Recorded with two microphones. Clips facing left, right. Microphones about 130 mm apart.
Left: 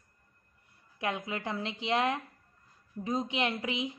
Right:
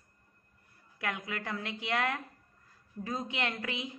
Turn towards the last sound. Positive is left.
turn(degrees=20)  # may be behind; listen again after turning